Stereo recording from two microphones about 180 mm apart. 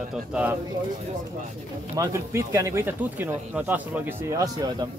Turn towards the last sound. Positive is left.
turn(degrees=-20)  # may be behind; listen again after turning